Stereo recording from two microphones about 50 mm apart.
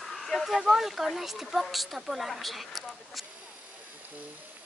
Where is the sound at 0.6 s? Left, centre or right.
Centre.